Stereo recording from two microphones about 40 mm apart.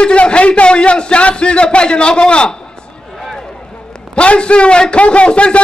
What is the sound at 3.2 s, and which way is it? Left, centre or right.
Run, centre.